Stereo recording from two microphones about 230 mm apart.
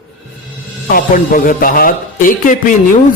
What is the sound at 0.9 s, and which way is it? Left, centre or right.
Speech, left.